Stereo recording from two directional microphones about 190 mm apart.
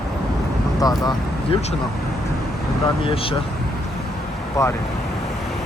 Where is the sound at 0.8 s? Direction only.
20° left (ahead or behind).